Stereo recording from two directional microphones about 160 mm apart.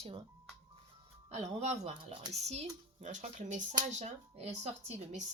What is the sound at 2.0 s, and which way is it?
Speech, 30° right (ahead or behind).